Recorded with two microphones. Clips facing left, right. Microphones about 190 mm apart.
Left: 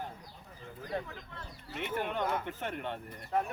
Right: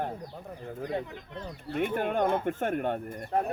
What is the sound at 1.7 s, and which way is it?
Speech, 50° right (ahead or behind).